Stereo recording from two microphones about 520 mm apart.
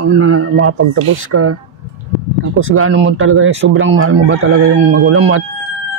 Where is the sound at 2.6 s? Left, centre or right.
Right.